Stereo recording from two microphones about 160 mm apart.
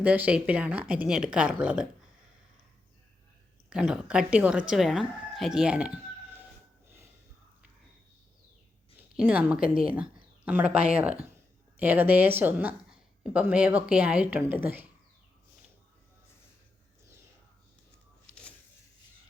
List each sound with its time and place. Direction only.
0.0 s a woman's voice: 10° right (ahead or behind)
3.7 s a woman's voice: 5° right (ahead or behind)
9.1 s a woman's voice: 10° right (ahead or behind)
9.6 s a woman's voice: 35° right (ahead or behind)
9.9 s a woman's voice: 10° right (ahead or behind)